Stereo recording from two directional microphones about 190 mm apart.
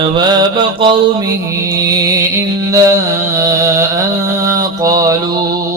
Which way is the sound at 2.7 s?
15° right (ahead or behind).